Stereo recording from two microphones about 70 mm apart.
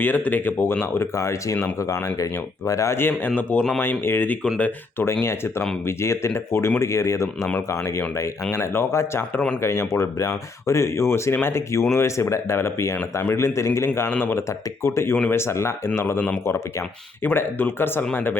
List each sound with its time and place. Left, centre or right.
0.0 s speech: left
2.9 s speech: left
5.2 s speech: left
14.3 s speech: left
17.2 s speech: left